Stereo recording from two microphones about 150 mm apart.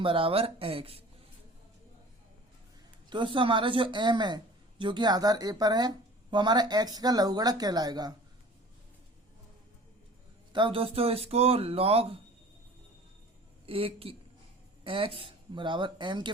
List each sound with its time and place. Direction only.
0.0 s speech: 35° right (ahead or behind)
3.1 s speech: 35° right (ahead or behind)
10.5 s speech: 35° right (ahead or behind)
13.7 s speech: 40° right (ahead or behind)